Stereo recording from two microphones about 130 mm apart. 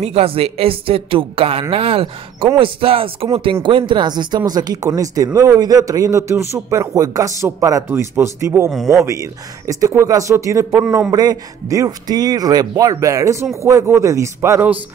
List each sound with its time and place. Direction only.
0.0 s a woman's voice: 50° right (ahead or behind); by 8.6 s 20° right (ahead or behind)
8.6 s speech: 5° right (ahead or behind)
9.0 s speech: 25° right (ahead or behind)
11.1 s speech: 30° right (ahead or behind)